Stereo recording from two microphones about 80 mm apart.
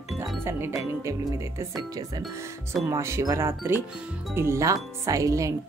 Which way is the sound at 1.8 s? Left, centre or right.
Right.